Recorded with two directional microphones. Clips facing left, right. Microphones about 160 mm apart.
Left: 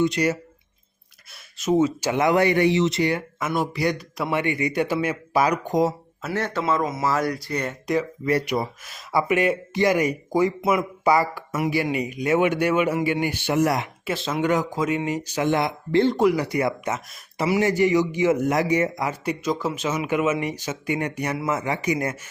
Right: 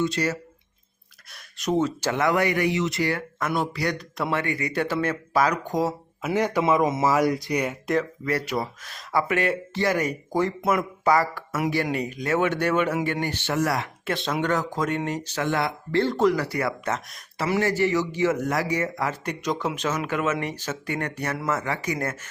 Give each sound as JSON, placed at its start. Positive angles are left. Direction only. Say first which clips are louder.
{"t": 0.0, "sound": "a man's voice", "louder": "left 4 dB", "side_deg": 15}
{"t": 1.5, "sound": "speech", "louder": "left 4 dB", "side_deg": 5}
{"t": 3.4, "sound": "a man's voice", "louder": "left 2 dB", "side_deg": 5}
{"t": 6.2, "sound": "a man's voice", "louder": "right 3 dB", "side_deg": -15}
{"t": 8.2, "sound": "a man's voice", "louder": "left 3 dB", "side_deg": 20}
{"t": 14.0, "sound": "a man's voice", "louder": "left 2 dB", "side_deg": 5}